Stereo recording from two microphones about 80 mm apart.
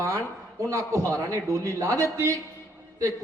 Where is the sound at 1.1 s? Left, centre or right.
Right.